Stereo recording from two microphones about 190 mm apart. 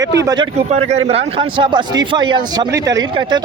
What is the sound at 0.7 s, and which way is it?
A man's voice, 35° right (ahead or behind).